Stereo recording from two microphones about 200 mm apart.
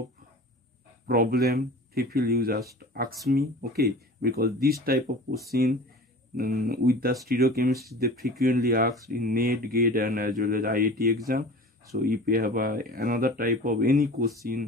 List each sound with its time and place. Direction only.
1.0 s a man's voice: 50° right (ahead or behind)